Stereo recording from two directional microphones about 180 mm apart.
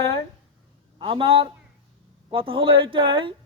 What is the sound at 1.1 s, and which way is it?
Speech, 30° right (ahead or behind).